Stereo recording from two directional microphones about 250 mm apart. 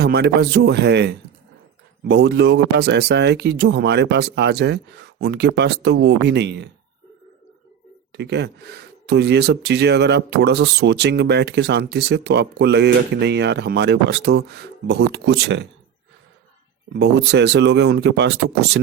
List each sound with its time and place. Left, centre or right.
0.0 s speech: right
8.1 s speech: right
16.9 s speech: right